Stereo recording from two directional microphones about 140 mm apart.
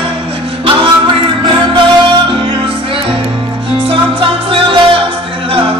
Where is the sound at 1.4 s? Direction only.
35° right (ahead or behind).